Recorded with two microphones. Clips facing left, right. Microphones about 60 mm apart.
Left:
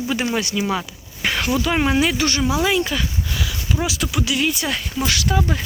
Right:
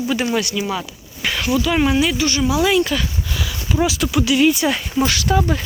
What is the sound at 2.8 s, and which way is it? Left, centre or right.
Speech, centre.